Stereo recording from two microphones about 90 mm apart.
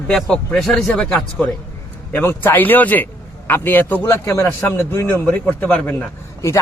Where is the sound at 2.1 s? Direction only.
25° left (ahead or behind).